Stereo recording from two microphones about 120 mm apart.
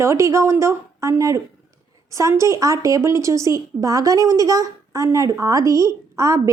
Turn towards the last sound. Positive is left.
turn(degrees=-25)  # may be behind; listen again after turning